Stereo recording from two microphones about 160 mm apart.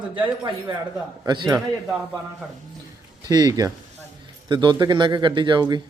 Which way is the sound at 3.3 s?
25° right (ahead or behind).